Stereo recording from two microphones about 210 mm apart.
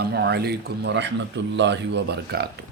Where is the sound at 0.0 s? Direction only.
50° right (ahead or behind).